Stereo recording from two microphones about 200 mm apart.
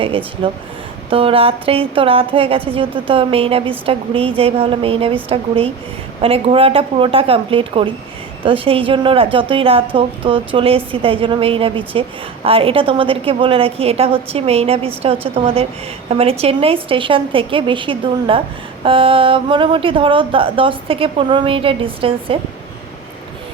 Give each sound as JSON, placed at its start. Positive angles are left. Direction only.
{"t": 0.0, "sound": "a woman's voice", "side_deg": -25}